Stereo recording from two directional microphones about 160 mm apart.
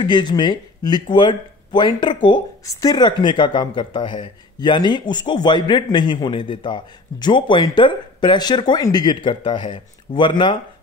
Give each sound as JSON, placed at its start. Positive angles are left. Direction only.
{"t": 0.0, "sound": "speech", "side_deg": 30}